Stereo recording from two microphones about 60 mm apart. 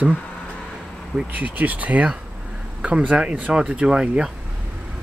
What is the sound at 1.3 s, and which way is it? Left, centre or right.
Speech, right.